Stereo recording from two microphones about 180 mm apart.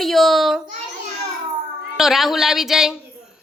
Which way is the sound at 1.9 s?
Centre (ahead or behind).